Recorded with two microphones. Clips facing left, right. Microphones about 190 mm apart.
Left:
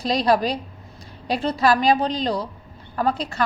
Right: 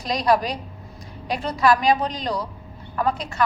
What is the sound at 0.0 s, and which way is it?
A woman's voice, 30° left (ahead or behind).